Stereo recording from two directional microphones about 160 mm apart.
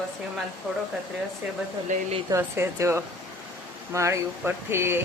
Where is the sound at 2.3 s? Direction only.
20° right (ahead or behind).